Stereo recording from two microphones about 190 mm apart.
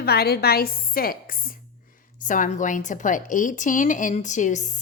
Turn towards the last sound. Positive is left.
turn(degrees=40)  # may be behind; listen again after turning